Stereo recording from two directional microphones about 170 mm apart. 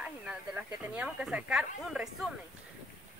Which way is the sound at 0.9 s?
5° right (ahead or behind).